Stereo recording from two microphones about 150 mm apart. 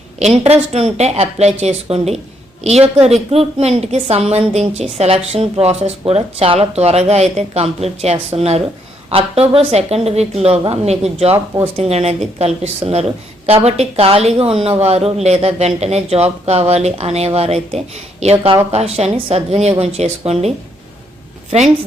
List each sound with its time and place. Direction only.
0.2 s a woman's voice: 45° right (ahead or behind)